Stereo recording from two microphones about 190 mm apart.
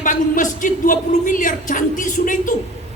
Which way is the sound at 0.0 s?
45° left (ahead or behind).